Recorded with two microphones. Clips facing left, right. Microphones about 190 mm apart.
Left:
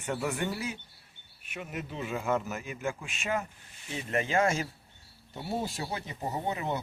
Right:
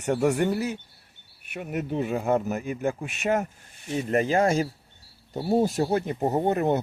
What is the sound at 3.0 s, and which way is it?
Speech, 65° right (ahead or behind).